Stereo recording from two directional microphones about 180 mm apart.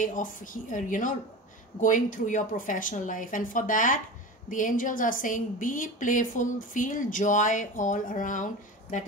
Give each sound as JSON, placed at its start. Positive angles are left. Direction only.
{"t": 0.0, "sound": "a woman's voice", "side_deg": 50}